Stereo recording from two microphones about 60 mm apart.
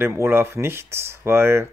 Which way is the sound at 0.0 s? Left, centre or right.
Right.